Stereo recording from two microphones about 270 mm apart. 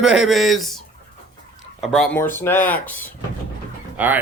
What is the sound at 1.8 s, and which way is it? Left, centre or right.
Speech, centre.